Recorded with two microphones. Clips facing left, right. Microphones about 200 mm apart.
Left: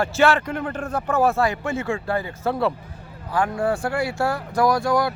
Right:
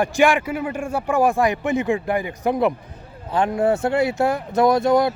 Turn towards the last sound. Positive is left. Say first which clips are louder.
# right 4 dB
turn(degrees=-20)  # may be behind; listen again after turning